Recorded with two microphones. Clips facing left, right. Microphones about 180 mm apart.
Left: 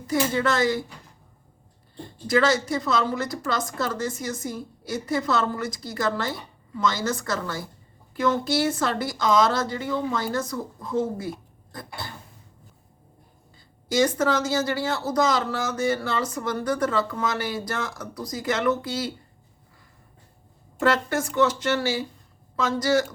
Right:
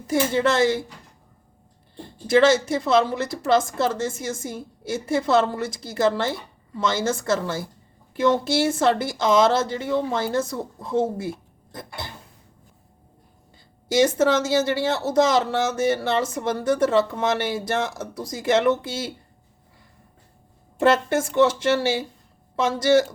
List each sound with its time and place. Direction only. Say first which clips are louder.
0.1 s a woman's voice: right 3 dB; 25° right (ahead or behind)
2.2 s a woman's voice: right 5 dB; 25° right (ahead or behind)
13.8 s a woman's voice: right 3 dB; 25° right (ahead or behind)
20.7 s a woman's voice: right 4 dB; 25° right (ahead or behind)